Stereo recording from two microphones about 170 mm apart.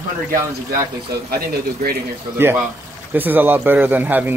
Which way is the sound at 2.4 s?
15° right (ahead or behind).